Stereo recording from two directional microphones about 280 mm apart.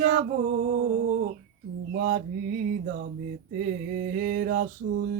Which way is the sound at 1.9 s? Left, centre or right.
Right.